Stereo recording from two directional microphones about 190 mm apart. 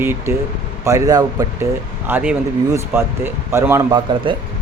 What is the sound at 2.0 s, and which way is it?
Speech, 10° right (ahead or behind).